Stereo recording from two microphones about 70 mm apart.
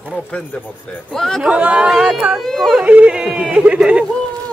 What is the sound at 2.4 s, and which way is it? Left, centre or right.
Music, centre.